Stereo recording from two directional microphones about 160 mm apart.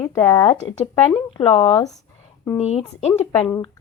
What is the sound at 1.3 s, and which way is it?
Speech, 35° left (ahead or behind).